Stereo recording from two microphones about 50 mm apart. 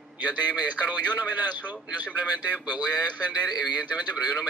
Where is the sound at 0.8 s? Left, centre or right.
Right.